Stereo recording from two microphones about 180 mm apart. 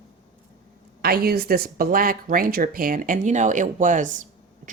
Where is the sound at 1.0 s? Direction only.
60° right (ahead or behind).